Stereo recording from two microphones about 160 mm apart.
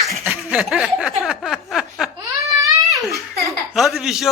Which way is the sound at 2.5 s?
20° right (ahead or behind).